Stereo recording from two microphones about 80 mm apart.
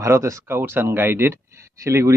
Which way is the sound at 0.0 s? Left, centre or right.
Right.